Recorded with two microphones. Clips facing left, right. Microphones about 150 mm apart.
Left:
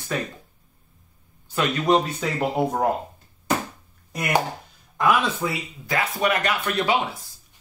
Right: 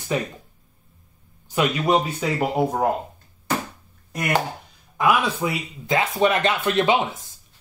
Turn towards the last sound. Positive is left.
turn(degrees=-20)  # may be behind; listen again after turning